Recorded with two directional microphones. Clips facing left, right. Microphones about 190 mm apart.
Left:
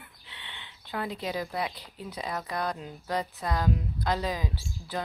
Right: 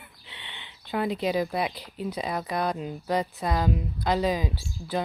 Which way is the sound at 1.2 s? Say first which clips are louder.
Right 6 dB; 15° right (ahead or behind).